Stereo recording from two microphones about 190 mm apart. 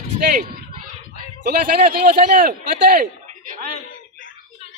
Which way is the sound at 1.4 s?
50° right (ahead or behind).